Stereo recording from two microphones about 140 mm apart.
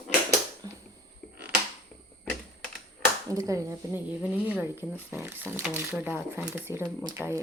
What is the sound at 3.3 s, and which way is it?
Speech, 20° right (ahead or behind).